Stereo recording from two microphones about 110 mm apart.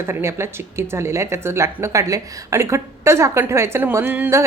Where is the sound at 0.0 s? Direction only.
25° right (ahead or behind).